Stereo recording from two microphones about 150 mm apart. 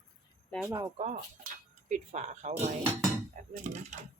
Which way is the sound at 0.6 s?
25° right (ahead or behind).